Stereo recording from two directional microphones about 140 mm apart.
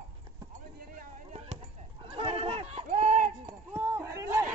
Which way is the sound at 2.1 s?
45° right (ahead or behind).